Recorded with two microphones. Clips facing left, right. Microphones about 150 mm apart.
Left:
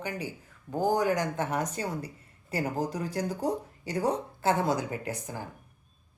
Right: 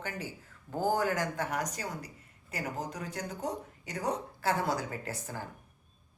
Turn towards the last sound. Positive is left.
turn(degrees=15)  # may be behind; listen again after turning